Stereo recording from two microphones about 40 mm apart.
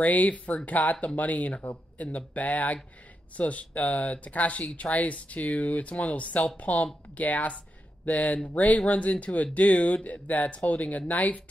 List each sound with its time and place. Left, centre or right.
0.0 s speech: left